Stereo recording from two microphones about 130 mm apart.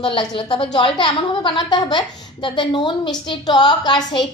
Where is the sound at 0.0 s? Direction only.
40° left (ahead or behind).